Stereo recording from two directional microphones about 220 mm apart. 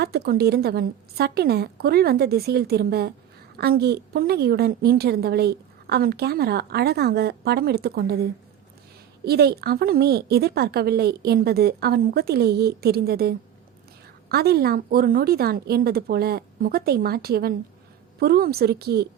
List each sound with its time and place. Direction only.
0.0 s a woman's voice: 45° right (ahead or behind)